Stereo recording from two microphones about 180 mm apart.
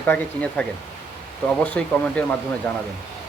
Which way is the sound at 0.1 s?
5° left (ahead or behind).